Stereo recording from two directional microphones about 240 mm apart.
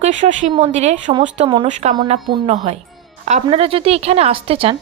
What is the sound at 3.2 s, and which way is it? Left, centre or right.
A woman's voice, right.